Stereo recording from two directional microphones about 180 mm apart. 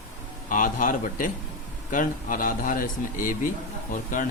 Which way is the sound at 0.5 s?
50° left (ahead or behind).